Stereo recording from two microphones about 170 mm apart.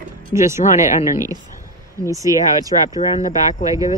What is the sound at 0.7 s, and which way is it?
Speech, 45° left (ahead or behind).